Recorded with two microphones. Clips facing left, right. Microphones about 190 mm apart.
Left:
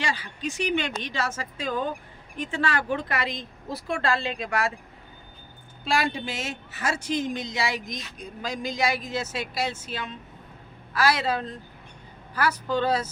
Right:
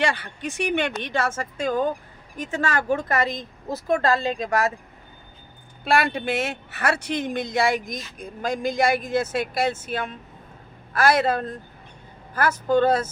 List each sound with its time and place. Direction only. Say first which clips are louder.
0.0 s speech: right 5 dB; 60° right (ahead or behind); by 4.7 s 40° right (ahead or behind)
5.8 s speech: right 4 dB; 60° right (ahead or behind)